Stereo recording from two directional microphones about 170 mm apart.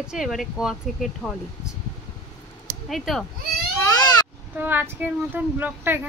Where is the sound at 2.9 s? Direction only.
Centre (ahead or behind).